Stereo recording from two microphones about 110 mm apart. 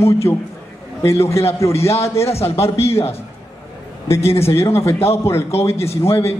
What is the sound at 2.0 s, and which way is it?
Speech, 25° left (ahead or behind).